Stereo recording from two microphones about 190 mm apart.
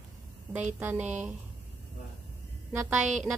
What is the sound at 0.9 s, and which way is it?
Speech, 40° right (ahead or behind).